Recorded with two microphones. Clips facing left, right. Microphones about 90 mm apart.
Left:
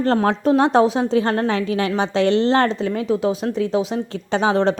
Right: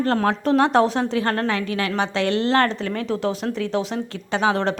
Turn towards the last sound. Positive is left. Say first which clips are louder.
# left 3 dB
turn(degrees=20)  # may be behind; listen again after turning